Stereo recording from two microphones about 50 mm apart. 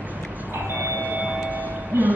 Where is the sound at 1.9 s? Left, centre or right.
Right.